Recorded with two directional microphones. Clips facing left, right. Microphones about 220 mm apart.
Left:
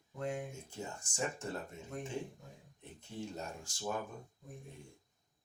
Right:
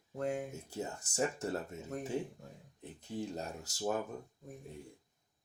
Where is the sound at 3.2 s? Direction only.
35° right (ahead or behind).